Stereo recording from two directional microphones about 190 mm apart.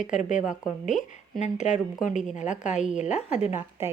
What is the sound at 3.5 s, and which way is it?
Speech, 10° right (ahead or behind).